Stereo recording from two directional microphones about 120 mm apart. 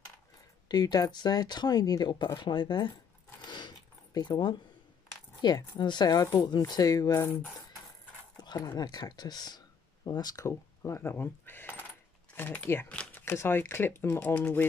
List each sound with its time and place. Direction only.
0.7 s speech: 35° left (ahead or behind)
3.4 s zipper: 40° left (ahead or behind)
5.4 s speech: 35° left (ahead or behind)
8.4 s speech: 35° left (ahead or behind); by 14.6 s 15° left (ahead or behind)